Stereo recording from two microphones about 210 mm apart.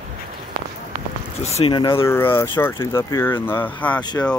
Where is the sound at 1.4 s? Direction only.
25° left (ahead or behind).